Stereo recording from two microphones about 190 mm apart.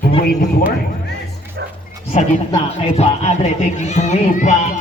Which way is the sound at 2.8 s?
35° left (ahead or behind).